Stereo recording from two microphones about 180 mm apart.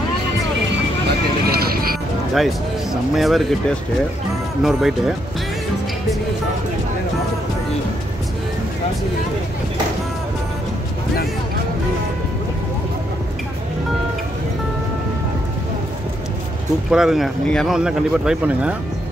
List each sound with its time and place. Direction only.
1.5 s music: 60° right (ahead or behind)
2.3 s speech: centre (ahead or behind)
16.9 s speech: centre (ahead or behind)